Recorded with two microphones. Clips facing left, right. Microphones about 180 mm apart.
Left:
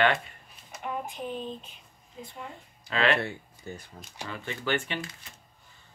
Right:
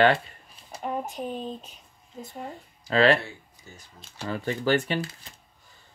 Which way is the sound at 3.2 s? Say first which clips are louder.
Left 6 dB; 60° left (ahead or behind).